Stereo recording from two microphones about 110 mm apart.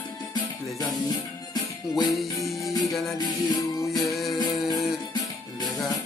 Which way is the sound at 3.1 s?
35° left (ahead or behind).